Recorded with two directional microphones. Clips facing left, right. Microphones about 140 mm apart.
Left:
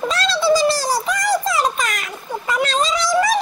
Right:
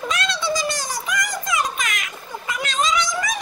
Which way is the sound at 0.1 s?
30° left (ahead or behind).